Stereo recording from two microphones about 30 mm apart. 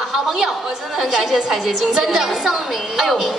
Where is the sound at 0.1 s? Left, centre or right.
Centre.